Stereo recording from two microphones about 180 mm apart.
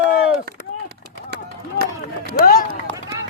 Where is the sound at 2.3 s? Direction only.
55° left (ahead or behind).